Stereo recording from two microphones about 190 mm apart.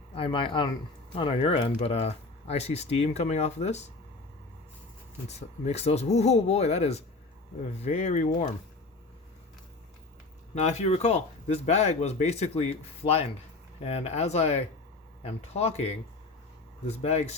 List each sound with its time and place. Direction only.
0.1 s speech: 30° left (ahead or behind)
5.3 s speech: 35° left (ahead or behind)
10.5 s speech: 35° left (ahead or behind)